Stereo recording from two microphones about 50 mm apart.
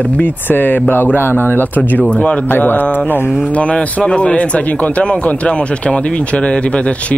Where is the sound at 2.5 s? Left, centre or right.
Left.